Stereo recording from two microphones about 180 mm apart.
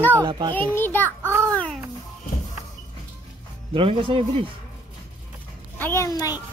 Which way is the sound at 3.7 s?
30° right (ahead or behind).